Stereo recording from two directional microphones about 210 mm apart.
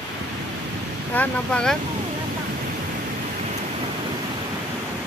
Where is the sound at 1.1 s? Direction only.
5° left (ahead or behind).